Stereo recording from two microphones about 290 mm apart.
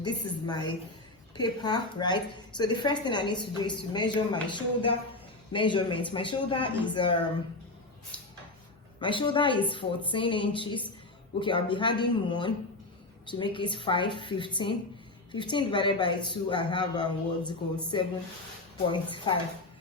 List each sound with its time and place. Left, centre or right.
0.0 s a woman's voice: centre
9.0 s a woman's voice: centre